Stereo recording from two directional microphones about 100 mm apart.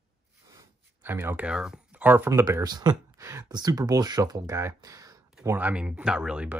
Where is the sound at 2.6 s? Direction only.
45° right (ahead or behind).